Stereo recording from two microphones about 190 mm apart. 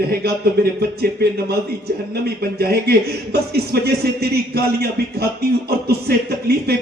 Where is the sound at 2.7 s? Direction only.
55° right (ahead or behind).